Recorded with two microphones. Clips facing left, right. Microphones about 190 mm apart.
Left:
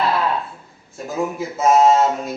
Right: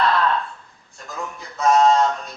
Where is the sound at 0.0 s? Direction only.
10° left (ahead or behind).